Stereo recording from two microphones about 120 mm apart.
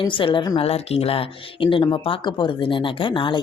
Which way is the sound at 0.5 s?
55° left (ahead or behind).